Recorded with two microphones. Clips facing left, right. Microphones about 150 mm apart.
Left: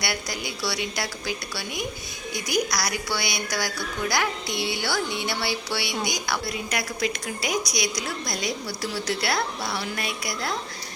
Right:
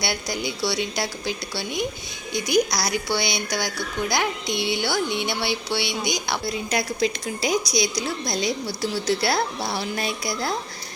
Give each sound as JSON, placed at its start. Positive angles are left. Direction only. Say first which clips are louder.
{"t": 0.0, "sound": "speech", "louder": "right 3 dB", "side_deg": -25}